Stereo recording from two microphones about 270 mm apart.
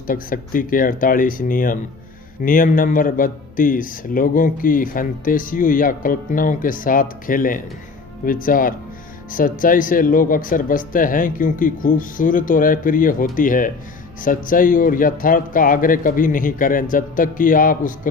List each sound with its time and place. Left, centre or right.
0.1 s speech: left